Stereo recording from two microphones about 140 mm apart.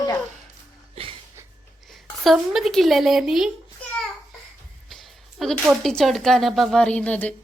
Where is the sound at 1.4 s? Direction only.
20° right (ahead or behind).